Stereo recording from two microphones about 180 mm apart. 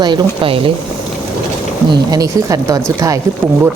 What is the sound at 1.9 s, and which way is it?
Speech, 20° right (ahead or behind).